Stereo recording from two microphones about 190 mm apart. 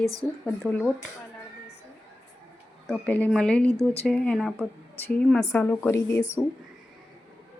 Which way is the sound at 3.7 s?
35° left (ahead or behind).